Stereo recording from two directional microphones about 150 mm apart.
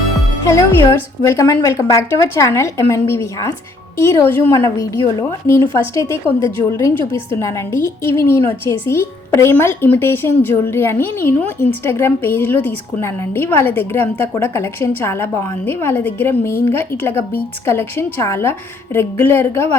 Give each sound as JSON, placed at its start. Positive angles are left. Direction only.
{"t": 0.4, "sound": "a woman's voice", "side_deg": 20}